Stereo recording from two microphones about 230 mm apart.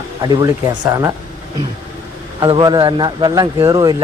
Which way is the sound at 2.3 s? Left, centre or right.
Centre.